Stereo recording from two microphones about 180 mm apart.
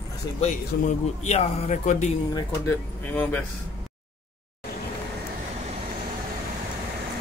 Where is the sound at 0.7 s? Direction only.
65° left (ahead or behind).